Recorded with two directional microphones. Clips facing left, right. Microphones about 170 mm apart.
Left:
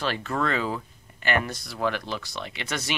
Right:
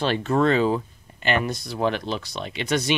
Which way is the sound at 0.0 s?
25° right (ahead or behind).